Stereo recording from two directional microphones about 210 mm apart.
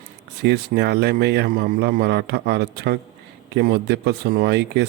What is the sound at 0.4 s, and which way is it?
A man's voice, 55° right (ahead or behind).